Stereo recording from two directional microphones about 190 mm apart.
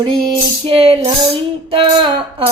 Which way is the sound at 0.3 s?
30° right (ahead or behind).